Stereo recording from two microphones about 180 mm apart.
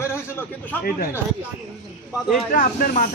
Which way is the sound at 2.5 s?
50° left (ahead or behind).